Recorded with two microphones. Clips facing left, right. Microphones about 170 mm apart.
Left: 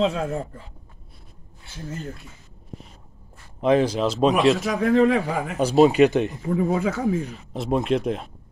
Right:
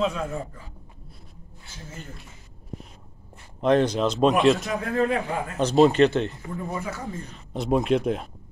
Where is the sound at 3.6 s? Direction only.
5° left (ahead or behind).